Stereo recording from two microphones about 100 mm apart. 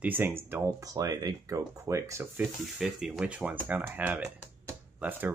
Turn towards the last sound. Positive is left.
turn(degrees=-20)  # may be behind; listen again after turning